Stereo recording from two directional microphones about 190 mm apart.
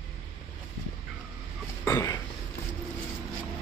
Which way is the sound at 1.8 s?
15° left (ahead or behind).